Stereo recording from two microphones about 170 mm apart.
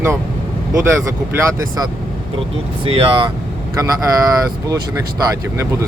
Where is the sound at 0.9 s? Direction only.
15° right (ahead or behind).